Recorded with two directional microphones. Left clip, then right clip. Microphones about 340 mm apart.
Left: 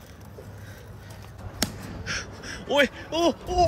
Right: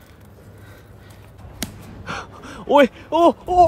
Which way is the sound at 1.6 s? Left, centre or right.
Centre.